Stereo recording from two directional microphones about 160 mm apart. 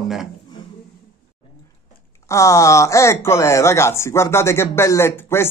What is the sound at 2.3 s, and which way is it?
Speech, 20° left (ahead or behind).